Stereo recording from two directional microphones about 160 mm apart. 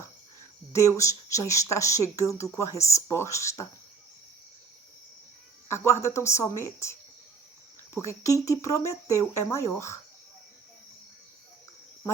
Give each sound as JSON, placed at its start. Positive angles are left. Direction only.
{"t": 0.7, "sound": "speech", "side_deg": 20}
{"t": 5.6, "sound": "a woman's voice", "side_deg": 15}
{"t": 7.9, "sound": "speech", "side_deg": 20}